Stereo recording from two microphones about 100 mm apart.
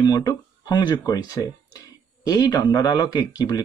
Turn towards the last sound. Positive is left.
turn(degrees=40)  # may be behind; listen again after turning